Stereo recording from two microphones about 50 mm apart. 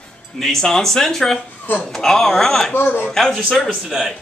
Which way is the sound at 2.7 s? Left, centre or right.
Left.